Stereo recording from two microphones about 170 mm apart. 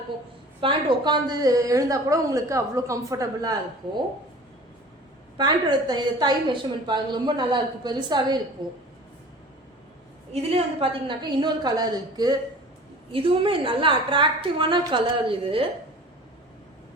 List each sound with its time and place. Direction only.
0.6 s a woman's voice: 30° right (ahead or behind)
5.4 s a woman's voice: 25° right (ahead or behind)
10.3 s a woman's voice: 35° right (ahead or behind)
11.2 s a woman's voice: 25° right (ahead or behind)